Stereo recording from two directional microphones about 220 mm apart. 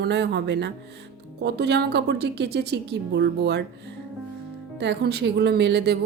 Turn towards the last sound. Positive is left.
turn(degrees=-50)  # may be behind; listen again after turning